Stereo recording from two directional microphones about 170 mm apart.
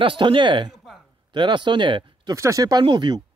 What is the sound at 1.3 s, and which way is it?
Speech, 30° right (ahead or behind).